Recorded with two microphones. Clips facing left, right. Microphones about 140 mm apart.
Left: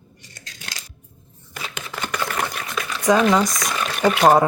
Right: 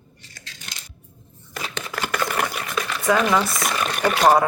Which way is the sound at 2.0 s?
5° right (ahead or behind).